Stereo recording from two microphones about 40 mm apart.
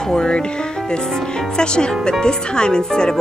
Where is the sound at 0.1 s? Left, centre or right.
Centre.